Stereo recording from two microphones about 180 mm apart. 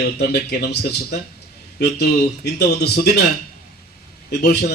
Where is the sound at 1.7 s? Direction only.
65° left (ahead or behind).